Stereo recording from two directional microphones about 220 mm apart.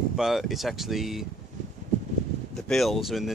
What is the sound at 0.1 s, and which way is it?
Speech, centre (ahead or behind).